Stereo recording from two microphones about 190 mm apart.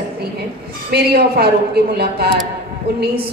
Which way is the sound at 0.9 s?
55° right (ahead or behind).